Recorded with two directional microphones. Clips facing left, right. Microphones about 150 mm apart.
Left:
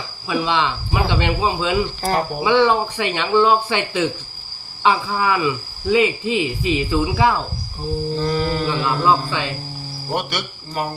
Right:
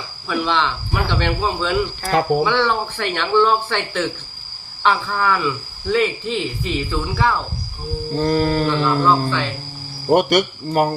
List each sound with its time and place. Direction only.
0.3 s speech: 10° left (ahead or behind)
8.2 s speech: 50° right (ahead or behind)
8.8 s speech: 10° left (ahead or behind)
10.1 s speech: 50° right (ahead or behind)